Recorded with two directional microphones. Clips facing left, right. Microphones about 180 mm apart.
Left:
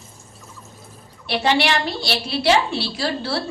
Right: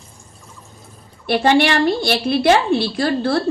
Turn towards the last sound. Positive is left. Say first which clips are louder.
# right 6 dB
turn(degrees=-50)  # may be behind; listen again after turning